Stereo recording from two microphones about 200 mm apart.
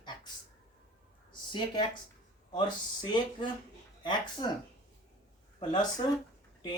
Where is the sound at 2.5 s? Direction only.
20° left (ahead or behind).